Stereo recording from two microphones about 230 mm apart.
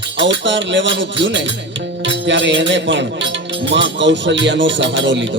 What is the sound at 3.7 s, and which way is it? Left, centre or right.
Speech, right.